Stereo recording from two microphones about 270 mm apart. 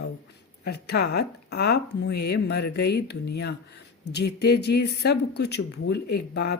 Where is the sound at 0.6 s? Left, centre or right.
Left.